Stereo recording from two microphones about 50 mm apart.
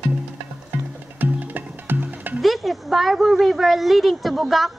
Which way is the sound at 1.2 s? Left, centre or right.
Right.